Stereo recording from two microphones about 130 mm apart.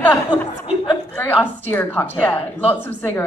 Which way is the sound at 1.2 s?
15° left (ahead or behind).